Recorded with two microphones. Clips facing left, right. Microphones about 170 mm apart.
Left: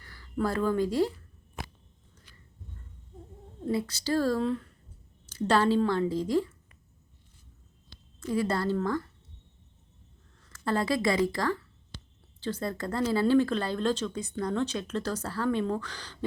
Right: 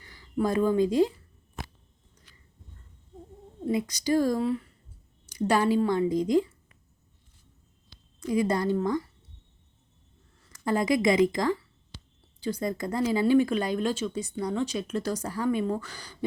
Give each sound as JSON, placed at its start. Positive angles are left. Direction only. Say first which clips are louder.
{"t": 0.0, "sound": "speech", "louder": "right 3 dB", "side_deg": -15}
{"t": 3.7, "sound": "speech", "louder": "right 3 dB", "side_deg": -15}
{"t": 7.9, "sound": "a sound", "louder": "left 3 dB", "side_deg": 0}
{"t": 8.3, "sound": "speech", "louder": "right 3 dB", "side_deg": -15}
{"t": 10.4, "sound": "a woman's voice", "louder": "right 2 dB", "side_deg": -15}